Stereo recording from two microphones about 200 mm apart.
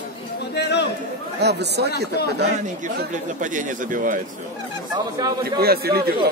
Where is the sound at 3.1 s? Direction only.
40° right (ahead or behind).